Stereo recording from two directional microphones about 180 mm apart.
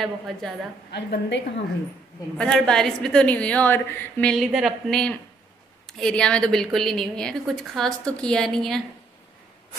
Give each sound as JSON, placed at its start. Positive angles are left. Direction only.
{"t": 0.0, "sound": "a woman's voice", "side_deg": 0}
{"t": 0.9, "sound": "a woman's voice", "side_deg": 70}
{"t": 2.3, "sound": "a woman's voice", "side_deg": 5}